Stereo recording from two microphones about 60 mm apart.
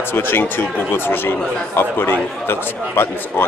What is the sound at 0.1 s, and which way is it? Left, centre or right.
Speech, left.